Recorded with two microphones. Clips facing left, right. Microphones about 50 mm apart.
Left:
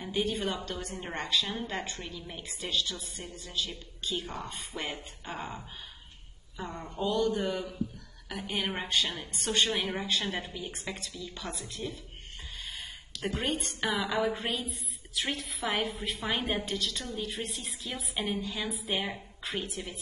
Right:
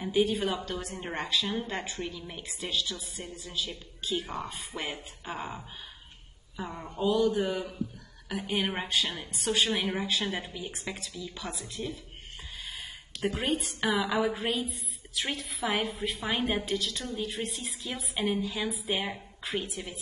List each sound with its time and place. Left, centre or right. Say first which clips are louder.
0.0 s a woman's voice: right 4 dB; centre
12.6 s a sound: even; centre
13.2 s a woman's voice: right 2 dB; centre